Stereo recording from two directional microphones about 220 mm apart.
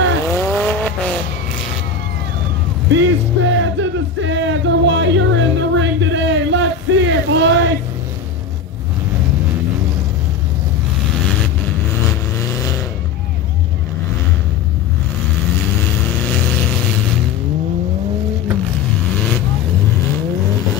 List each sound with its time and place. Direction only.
0.3 s vehicle: 5° left (ahead or behind)
2.9 s music: 60° right (ahead or behind)